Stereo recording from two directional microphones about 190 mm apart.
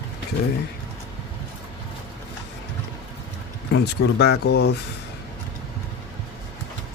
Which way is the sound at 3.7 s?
65° left (ahead or behind).